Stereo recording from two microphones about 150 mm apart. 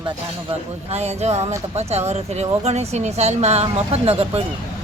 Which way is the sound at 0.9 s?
45° right (ahead or behind).